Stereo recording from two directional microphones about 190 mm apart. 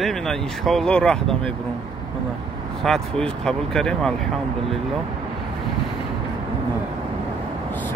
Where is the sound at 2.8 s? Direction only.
5° left (ahead or behind).